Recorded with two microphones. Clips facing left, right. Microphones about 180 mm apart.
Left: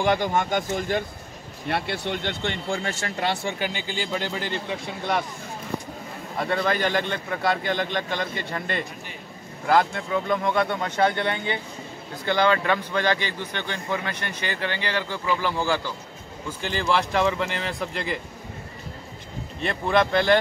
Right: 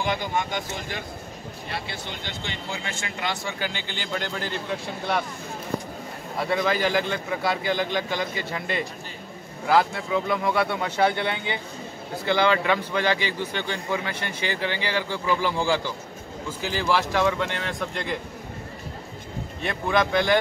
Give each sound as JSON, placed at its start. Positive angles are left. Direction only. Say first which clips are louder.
{"t": 0.0, "sound": "speech", "louder": "left 4 dB", "side_deg": 45}
{"t": 1.7, "sound": "speech", "louder": "left 8 dB", "side_deg": 65}
{"t": 3.6, "sound": "a man's voice", "louder": "left 3 dB", "side_deg": 10}
{"t": 6.4, "sound": "a man's voice", "louder": "even", "side_deg": -5}
{"t": 19.6, "sound": "a man's voice", "louder": "left 2 dB", "side_deg": 0}